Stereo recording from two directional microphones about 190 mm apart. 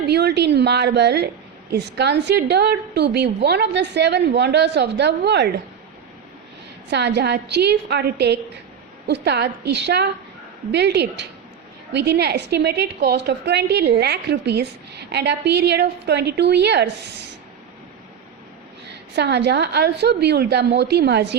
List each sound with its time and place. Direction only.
0.0 s a woman's voice: 60° right (ahead or behind)
6.9 s a woman's voice: 60° right (ahead or behind)
19.1 s a woman's voice: 60° right (ahead or behind)